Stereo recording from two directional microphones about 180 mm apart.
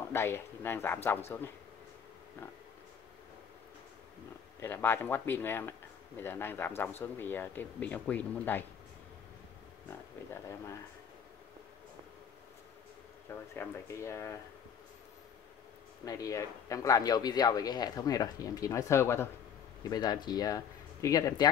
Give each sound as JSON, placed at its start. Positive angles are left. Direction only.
{"t": 0.1, "sound": "speech", "side_deg": 15}
{"t": 4.6, "sound": "speech", "side_deg": 15}
{"t": 13.3, "sound": "speech", "side_deg": 15}
{"t": 16.1, "sound": "speech", "side_deg": 20}